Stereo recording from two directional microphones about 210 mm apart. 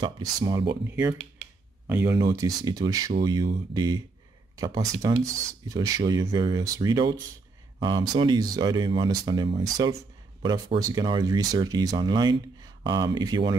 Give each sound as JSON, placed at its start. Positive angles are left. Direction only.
{"t": 0.0, "sound": "speech", "side_deg": -20}